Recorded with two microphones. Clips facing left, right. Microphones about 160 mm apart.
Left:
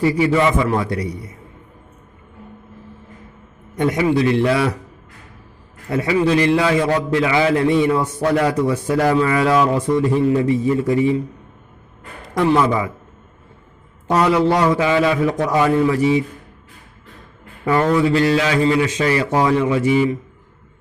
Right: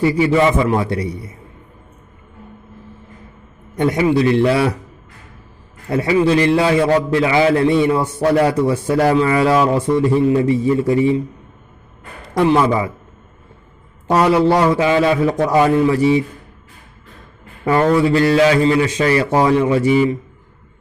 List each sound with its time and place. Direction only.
0.0 s a man's voice: 25° right (ahead or behind)
3.8 s a man's voice: 30° right (ahead or behind)
5.9 s a man's voice: 30° right (ahead or behind)
12.3 s a man's voice: 25° right (ahead or behind)
14.1 s a man's voice: 30° right (ahead or behind)
17.7 s a man's voice: 30° right (ahead or behind)